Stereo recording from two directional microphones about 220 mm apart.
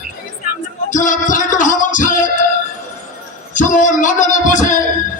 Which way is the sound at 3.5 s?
35° left (ahead or behind).